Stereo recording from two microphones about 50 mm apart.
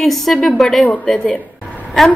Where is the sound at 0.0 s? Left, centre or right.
Centre.